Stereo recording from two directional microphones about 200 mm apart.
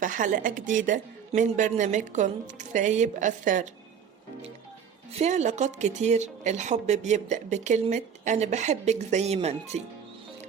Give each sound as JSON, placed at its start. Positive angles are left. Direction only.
{"t": 0.0, "sound": "speech", "side_deg": -40}
{"t": 5.1, "sound": "speech", "side_deg": -35}